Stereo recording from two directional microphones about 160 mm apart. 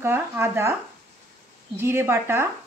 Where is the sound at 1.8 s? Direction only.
15° right (ahead or behind).